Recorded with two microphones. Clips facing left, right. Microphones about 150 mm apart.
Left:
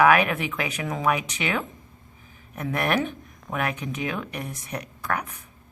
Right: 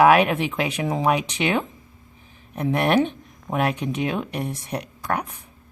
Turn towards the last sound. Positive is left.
turn(degrees=-30)  # may be behind; listen again after turning